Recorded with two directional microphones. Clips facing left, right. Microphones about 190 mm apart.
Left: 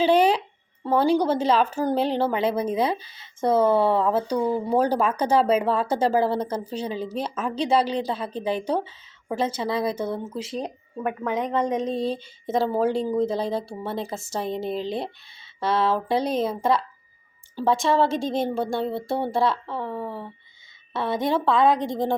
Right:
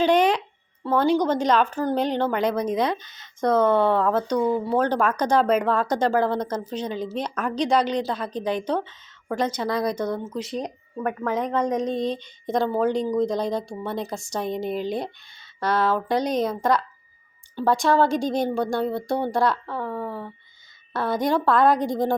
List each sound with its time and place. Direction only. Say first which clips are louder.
0.0 s a sound: even; 5° left (ahead or behind)
1.1 s a woman's voice: even; 10° left (ahead or behind)
10.6 s a woman's voice: right 1 dB; 20° left (ahead or behind)
11.9 s a woman's voice: even; 5° left (ahead or behind)
14.7 s a woman's voice: right 1 dB; 30° left (ahead or behind)
15.4 s a sound: even; 5° left (ahead or behind)
16.0 s a woman's voice: right 1 dB; 5° left (ahead or behind)